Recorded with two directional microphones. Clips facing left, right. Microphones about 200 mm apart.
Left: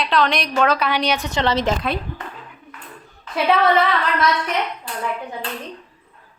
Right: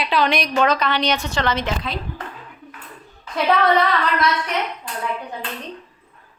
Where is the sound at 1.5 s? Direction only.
40° left (ahead or behind).